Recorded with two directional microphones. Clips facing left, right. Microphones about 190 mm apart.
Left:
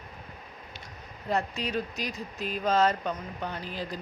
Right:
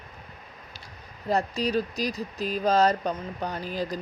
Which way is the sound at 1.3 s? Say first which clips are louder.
Right 4 dB; 35° right (ahead or behind).